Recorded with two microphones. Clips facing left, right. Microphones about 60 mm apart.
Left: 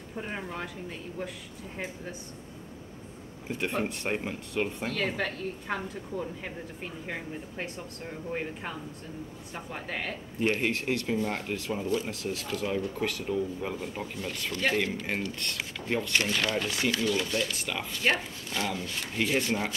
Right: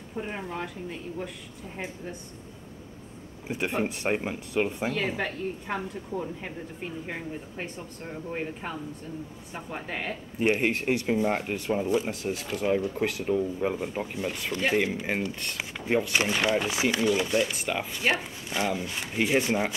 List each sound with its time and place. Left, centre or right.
0.2 s speech: centre
3.4 s speech: centre